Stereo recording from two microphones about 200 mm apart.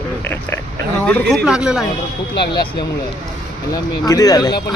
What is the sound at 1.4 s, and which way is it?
Speech, 5° right (ahead or behind).